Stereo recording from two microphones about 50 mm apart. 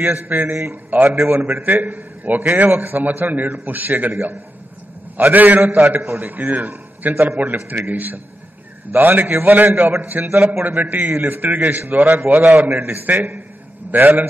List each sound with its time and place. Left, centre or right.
0.0 s a man's voice: right
12.3 s a man's voice: right
12.6 s a man's voice: right